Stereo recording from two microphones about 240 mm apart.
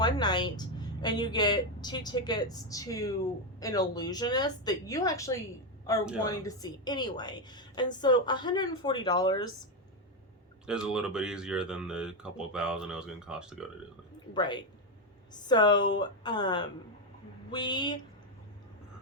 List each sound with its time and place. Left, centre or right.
0.0 s a woman's voice: centre
10.7 s speech: centre
14.3 s a woman's voice: centre